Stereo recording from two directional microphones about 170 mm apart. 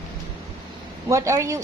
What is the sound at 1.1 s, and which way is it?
Speech, 15° right (ahead or behind).